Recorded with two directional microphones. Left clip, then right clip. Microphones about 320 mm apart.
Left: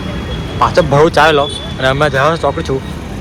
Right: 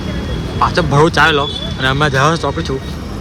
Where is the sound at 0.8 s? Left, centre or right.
Centre.